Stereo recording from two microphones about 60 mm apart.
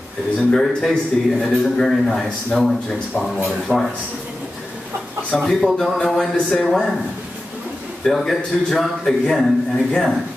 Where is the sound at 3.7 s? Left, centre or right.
Centre.